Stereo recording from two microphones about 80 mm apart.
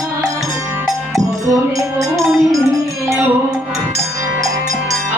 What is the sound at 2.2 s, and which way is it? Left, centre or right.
Music, centre.